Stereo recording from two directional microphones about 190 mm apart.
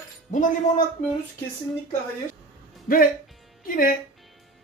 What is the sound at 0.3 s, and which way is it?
Speech, 40° left (ahead or behind).